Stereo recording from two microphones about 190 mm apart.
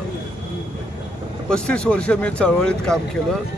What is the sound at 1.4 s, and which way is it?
Speech, 5° left (ahead or behind).